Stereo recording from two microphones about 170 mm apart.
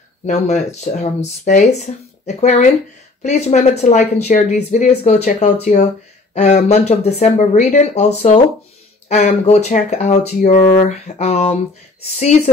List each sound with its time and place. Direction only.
0.3 s speech: 40° left (ahead or behind)